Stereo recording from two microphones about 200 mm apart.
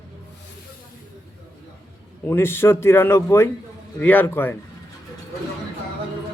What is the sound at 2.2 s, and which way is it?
Speech, 10° left (ahead or behind).